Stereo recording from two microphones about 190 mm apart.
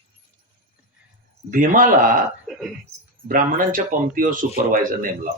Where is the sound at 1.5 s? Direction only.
45° right (ahead or behind).